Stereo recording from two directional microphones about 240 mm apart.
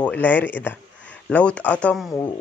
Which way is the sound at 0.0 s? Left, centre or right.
Centre.